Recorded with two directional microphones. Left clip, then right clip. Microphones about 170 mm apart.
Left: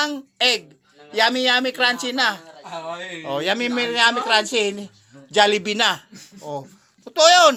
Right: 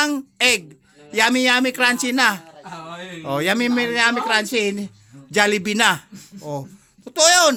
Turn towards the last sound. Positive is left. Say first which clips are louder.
# left 2 dB
turn(degrees=-10)  # may be behind; listen again after turning